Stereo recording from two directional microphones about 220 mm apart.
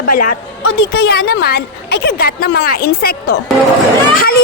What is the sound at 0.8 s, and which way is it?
Speech, 45° left (ahead or behind).